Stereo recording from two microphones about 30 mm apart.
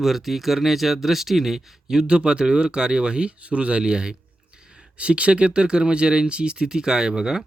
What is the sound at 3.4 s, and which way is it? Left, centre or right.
Speech, right.